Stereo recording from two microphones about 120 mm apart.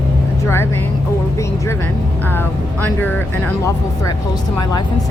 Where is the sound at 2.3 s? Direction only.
15° left (ahead or behind).